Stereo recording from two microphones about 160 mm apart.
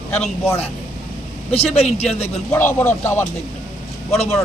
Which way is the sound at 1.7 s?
40° left (ahead or behind).